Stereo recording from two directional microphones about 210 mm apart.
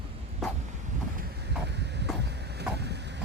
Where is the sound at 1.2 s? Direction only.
50° right (ahead or behind).